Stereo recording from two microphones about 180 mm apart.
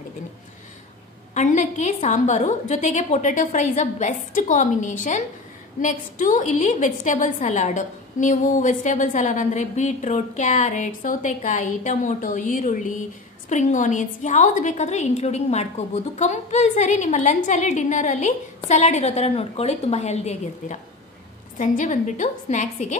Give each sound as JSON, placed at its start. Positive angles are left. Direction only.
{"t": 1.3, "sound": "a woman's voice", "side_deg": 40}